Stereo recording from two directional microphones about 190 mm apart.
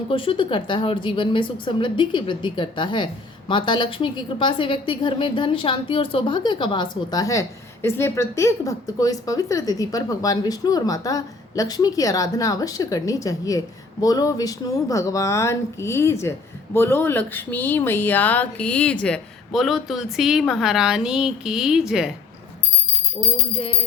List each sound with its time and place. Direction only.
0.1 s a woman's voice: 30° left (ahead or behind); by 22.1 s 5° right (ahead or behind)